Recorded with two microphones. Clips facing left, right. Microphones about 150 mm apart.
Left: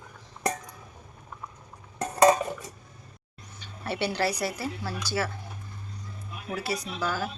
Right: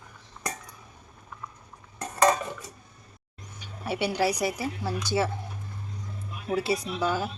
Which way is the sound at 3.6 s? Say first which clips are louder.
Right 1 dB; 10° right (ahead or behind).